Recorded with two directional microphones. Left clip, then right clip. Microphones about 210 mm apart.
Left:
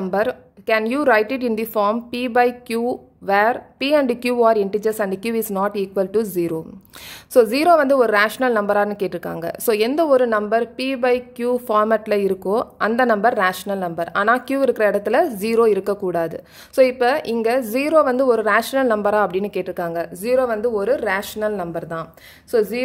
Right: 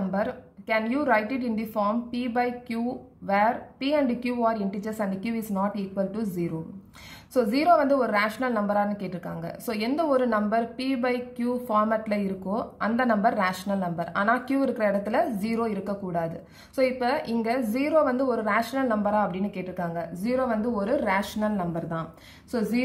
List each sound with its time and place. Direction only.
0.1 s a woman's voice: 45° left (ahead or behind)